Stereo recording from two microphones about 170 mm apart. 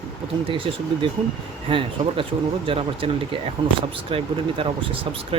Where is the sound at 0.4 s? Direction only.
30° right (ahead or behind).